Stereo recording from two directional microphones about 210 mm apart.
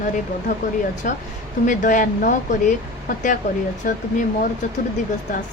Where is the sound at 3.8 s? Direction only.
40° left (ahead or behind).